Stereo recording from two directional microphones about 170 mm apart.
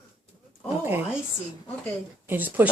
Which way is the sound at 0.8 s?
10° right (ahead or behind).